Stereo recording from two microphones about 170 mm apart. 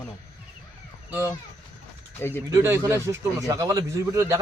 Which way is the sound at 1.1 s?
10° right (ahead or behind).